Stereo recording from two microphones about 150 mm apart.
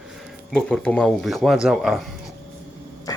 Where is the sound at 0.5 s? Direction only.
5° left (ahead or behind).